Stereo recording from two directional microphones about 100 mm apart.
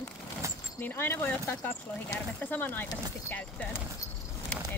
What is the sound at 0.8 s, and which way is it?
Speech, 20° left (ahead or behind).